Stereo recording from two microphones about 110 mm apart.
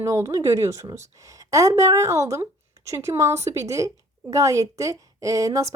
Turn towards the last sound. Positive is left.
turn(degrees=-30)  # may be behind; listen again after turning